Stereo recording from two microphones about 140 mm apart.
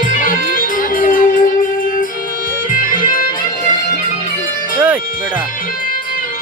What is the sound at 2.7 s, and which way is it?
Music, 75° left (ahead or behind).